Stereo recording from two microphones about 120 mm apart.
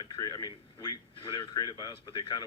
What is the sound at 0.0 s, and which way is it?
A man's voice, 35° left (ahead or behind).